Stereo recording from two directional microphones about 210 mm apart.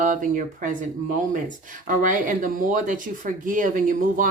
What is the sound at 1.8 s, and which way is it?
A woman's voice, 40° right (ahead or behind).